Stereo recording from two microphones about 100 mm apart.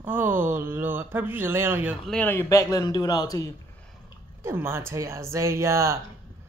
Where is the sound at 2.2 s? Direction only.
25° left (ahead or behind).